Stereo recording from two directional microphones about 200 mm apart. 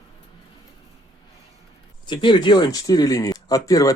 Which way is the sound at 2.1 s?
25° left (ahead or behind).